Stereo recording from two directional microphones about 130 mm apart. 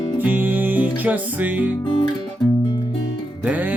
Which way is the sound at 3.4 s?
15° right (ahead or behind).